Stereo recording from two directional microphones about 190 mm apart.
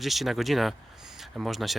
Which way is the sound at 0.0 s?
Centre (ahead or behind).